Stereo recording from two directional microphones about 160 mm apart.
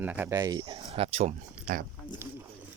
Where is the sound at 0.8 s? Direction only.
40° right (ahead or behind).